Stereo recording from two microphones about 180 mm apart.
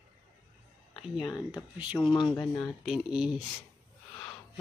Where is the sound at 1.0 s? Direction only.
Centre (ahead or behind).